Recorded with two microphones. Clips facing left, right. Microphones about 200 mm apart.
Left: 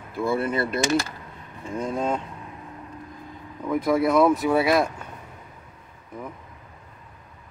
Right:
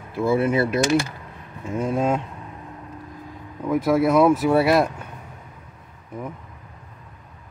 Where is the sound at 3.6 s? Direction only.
5° right (ahead or behind).